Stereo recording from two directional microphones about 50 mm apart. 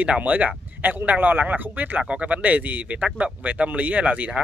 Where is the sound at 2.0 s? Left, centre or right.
Right.